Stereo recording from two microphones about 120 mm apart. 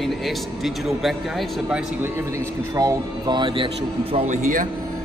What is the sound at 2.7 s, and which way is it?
Speech, 35° right (ahead or behind).